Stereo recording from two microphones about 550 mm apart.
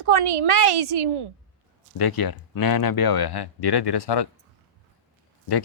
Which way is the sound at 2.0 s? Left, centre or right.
Left.